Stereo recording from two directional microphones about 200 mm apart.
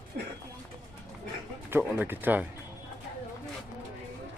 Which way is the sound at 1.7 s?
10° right (ahead or behind).